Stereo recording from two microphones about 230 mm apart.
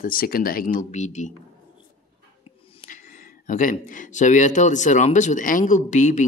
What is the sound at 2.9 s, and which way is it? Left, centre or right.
Speech, left.